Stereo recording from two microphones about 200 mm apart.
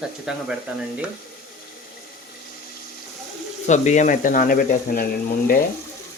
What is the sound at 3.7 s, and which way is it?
Speech, 35° left (ahead or behind).